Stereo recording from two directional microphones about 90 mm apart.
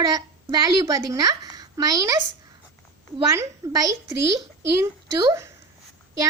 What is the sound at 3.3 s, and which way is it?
A woman's voice, 35° right (ahead or behind).